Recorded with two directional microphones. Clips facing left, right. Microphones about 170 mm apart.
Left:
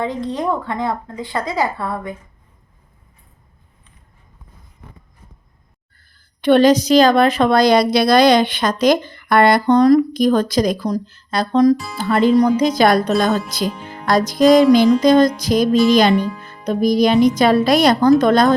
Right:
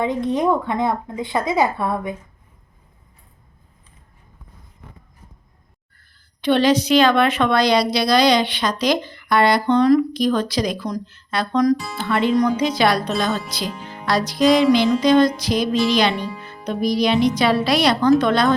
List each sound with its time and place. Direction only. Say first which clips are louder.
0.0 s speech: right 2 dB; 20° right (ahead or behind)
6.4 s a woman's voice: left 5 dB; 50° left (ahead or behind); by 11.8 s 30° left (ahead or behind)
11.9 s a woman's voice: left 4 dB; 40° left (ahead or behind)
16.3 s music: right 1 dB; centre (ahead or behind)
16.8 s a woman's voice: left 4 dB; 45° left (ahead or behind)